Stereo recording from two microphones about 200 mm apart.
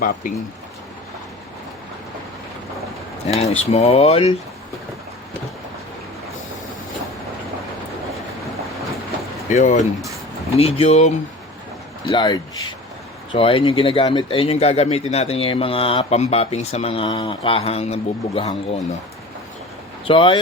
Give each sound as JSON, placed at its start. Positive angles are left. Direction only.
{"t": 0.0, "sound": "speech", "side_deg": 45}
{"t": 3.2, "sound": "speech", "side_deg": 30}
{"t": 9.5, "sound": "speech", "side_deg": 35}
{"t": 12.1, "sound": "speech", "side_deg": 20}
{"t": 20.1, "sound": "speech", "side_deg": 25}